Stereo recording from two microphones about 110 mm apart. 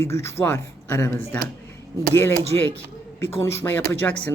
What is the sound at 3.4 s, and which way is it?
Speech, 20° left (ahead or behind).